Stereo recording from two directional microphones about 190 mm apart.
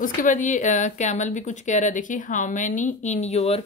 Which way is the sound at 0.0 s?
45° left (ahead or behind).